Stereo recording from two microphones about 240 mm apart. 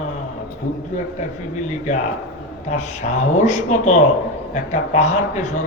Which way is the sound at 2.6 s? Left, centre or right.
Left.